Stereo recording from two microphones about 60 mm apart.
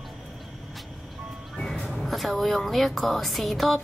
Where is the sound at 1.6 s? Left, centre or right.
Centre.